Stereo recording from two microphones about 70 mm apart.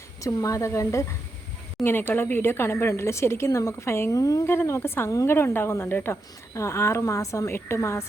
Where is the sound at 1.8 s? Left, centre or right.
Left.